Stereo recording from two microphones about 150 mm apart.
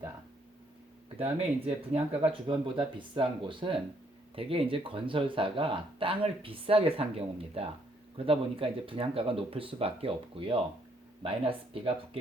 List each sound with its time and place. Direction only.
1.2 s speech: 45° right (ahead or behind)